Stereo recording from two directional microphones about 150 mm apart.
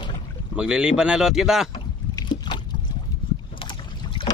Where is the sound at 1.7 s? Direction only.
30° left (ahead or behind).